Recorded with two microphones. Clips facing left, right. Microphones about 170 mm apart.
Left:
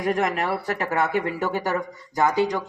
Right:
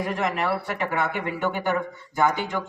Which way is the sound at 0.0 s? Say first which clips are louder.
Left 2 dB; 45° left (ahead or behind).